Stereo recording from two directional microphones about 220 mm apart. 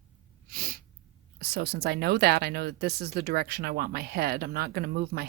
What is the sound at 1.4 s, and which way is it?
Speech, 45° right (ahead or behind).